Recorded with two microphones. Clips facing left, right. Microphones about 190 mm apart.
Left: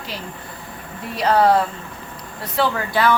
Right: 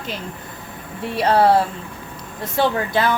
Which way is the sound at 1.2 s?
30° right (ahead or behind).